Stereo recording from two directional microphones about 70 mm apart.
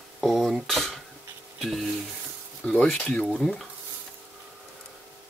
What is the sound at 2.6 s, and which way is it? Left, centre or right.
Speech, centre.